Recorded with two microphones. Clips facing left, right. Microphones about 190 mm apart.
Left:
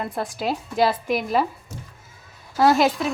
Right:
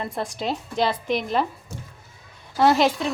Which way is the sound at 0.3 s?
5° left (ahead or behind).